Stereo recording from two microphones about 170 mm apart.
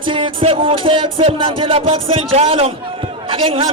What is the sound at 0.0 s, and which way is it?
A man's voice, 30° right (ahead or behind).